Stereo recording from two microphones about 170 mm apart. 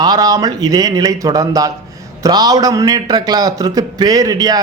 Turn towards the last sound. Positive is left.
turn(degrees=-20)  # may be behind; listen again after turning